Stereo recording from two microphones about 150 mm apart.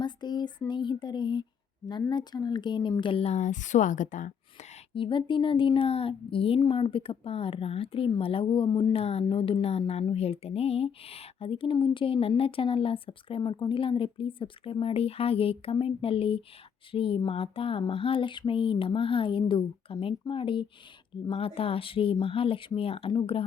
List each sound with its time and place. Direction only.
0.0 s a sound: 30° left (ahead or behind)
0.7 s speech: 30° left (ahead or behind)
3.3 s a woman's voice: 55° left (ahead or behind)
4.9 s speech: 35° left (ahead or behind)
9.0 s speech: 45° left (ahead or behind)